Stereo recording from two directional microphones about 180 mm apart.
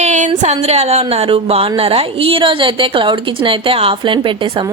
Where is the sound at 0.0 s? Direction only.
45° right (ahead or behind).